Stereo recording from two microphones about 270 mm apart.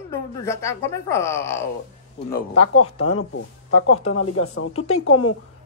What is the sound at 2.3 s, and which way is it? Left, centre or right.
Speech, left.